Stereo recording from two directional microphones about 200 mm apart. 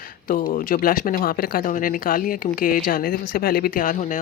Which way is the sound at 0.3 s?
45° left (ahead or behind).